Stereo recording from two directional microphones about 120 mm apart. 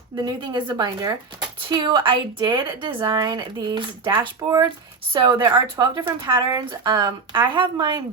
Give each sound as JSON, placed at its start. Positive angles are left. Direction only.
{"t": 0.2, "sound": "a woman's voice", "side_deg": -35}